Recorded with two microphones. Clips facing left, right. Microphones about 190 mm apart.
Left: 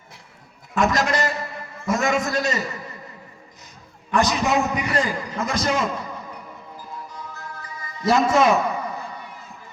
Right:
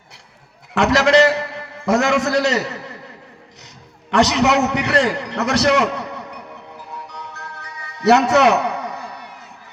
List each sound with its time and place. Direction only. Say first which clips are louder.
0.7 s a sound: right 6 dB; 75° right (ahead or behind)
4.1 s a man's voice: right 5 dB; 75° right (ahead or behind)
6.9 s music: right 2 dB; 70° right (ahead or behind)